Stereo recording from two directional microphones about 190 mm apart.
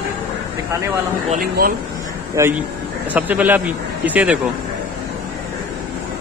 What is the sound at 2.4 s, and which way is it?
Speech, 15° right (ahead or behind).